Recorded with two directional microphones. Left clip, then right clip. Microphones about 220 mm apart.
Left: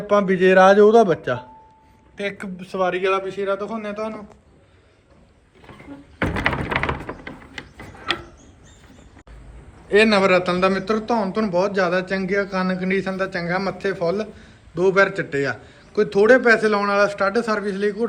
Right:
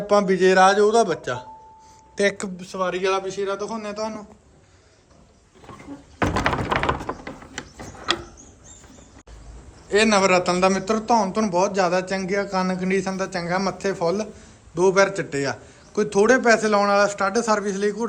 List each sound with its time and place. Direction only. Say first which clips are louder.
0.1 s speech: left 2 dB; 5° right (ahead or behind)
2.1 s speech: right 6 dB; 20° right (ahead or behind)
2.6 s a man's voice: left 3 dB; centre (ahead or behind)
6.6 s a sound: right 1 dB; 50° right (ahead or behind)
7.8 s ratchet: right 1 dB; 35° right (ahead or behind)
9.9 s a man's voice: left 2 dB; 5° right (ahead or behind)